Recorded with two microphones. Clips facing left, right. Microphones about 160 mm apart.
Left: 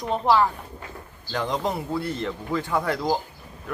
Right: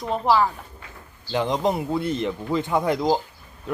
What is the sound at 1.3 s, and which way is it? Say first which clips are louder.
Speech: right 4 dB; 20° right (ahead or behind).